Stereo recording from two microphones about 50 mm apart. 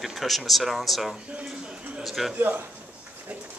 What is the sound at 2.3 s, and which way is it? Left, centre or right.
Speech, right.